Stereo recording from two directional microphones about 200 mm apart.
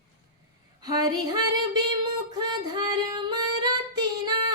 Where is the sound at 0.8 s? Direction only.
20° right (ahead or behind).